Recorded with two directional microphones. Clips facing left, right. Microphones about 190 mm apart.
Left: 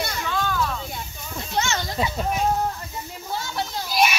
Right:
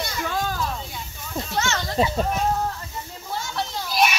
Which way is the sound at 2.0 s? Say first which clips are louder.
Right 5 dB; 25° right (ahead or behind).